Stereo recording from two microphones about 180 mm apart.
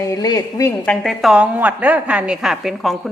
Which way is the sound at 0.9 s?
Centre (ahead or behind).